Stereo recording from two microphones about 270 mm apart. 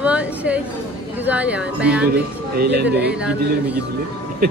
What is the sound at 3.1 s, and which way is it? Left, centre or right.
Speech, centre.